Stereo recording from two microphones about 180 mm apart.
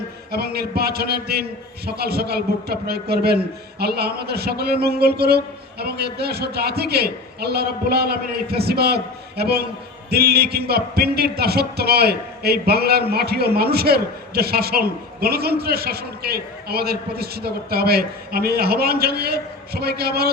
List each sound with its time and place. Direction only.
0.3 s a man's voice: 60° right (ahead or behind)